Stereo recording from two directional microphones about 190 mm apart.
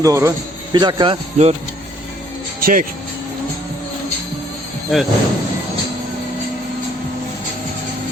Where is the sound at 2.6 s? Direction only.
50° right (ahead or behind).